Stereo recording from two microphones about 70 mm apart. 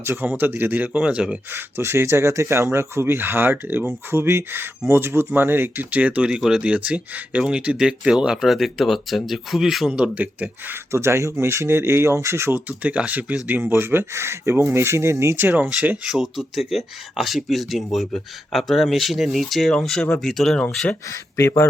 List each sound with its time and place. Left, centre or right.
0.0 s speech: right
0.9 s speech: centre
1.5 s speech: right; by 9.9 s centre
9.9 s speech: centre
10.9 s speech: right
13.7 s speech: right
15.4 s speech: right
16.0 s speech: centre
21.1 s speech: left